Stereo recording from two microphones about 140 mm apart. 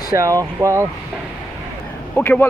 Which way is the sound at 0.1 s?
25° right (ahead or behind).